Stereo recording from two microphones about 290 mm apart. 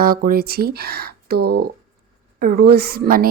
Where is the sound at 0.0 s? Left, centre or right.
Right.